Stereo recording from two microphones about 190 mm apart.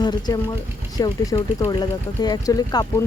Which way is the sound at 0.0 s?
20° left (ahead or behind).